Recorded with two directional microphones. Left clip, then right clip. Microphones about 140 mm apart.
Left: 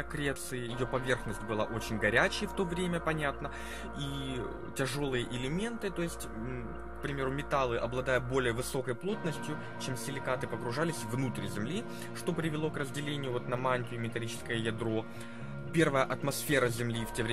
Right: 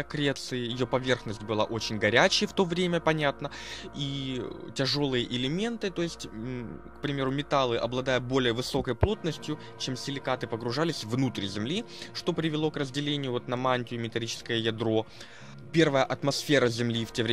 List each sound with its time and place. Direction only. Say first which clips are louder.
0.1 s speech: right 8 dB; 55° right (ahead or behind)
4.0 s speech: right 5 dB; 35° right (ahead or behind); by 17.3 s 55° right (ahead or behind)